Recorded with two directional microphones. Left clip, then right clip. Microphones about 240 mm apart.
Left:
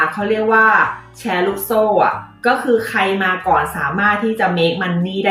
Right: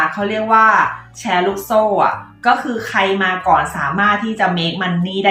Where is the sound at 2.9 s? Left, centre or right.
Centre.